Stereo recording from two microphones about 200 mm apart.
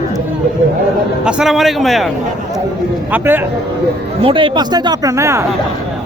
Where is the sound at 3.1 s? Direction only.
10° right (ahead or behind).